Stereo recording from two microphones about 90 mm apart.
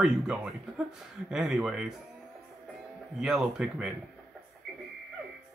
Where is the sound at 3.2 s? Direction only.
10° right (ahead or behind).